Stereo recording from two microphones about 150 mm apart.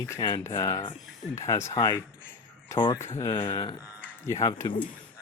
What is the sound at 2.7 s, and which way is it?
Speech, 30° left (ahead or behind).